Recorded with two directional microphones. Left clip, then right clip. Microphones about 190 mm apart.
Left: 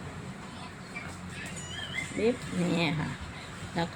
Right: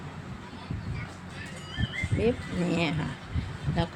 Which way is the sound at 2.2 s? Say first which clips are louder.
Right 1 dB; 5° right (ahead or behind).